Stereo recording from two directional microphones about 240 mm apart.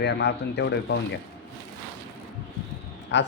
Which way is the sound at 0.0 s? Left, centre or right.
Left.